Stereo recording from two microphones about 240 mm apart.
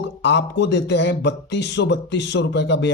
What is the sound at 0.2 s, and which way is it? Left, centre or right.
Speech, left.